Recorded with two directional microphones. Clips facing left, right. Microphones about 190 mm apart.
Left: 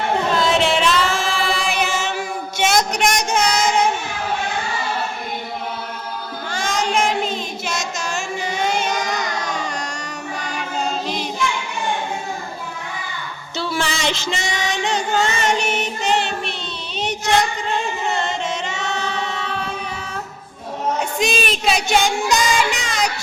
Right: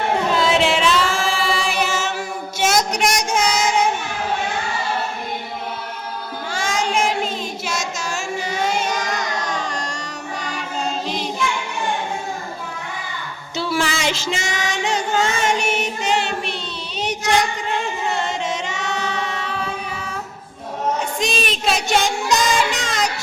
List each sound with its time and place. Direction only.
0.3 s singing: 5° right (ahead or behind)
2.9 s a sound: 5° left (ahead or behind)
6.5 s child singing: 10° right (ahead or behind)
13.6 s a sound: 5° right (ahead or behind)
18.4 s choir: 10° right (ahead or behind)
21.2 s child singing: centre (ahead or behind)